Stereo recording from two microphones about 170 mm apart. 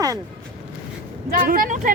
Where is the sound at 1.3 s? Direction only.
55° right (ahead or behind).